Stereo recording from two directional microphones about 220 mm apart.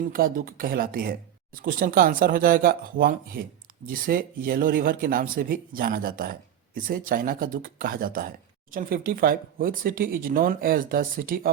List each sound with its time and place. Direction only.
0.0 s speech: 40° right (ahead or behind)